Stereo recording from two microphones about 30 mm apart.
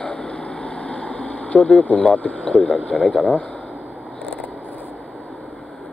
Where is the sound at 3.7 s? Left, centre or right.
Right.